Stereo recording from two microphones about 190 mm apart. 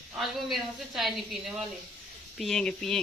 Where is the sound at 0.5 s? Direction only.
Centre (ahead or behind).